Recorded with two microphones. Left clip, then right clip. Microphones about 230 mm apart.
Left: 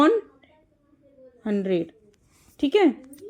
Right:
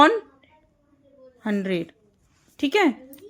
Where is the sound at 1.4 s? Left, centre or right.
Centre.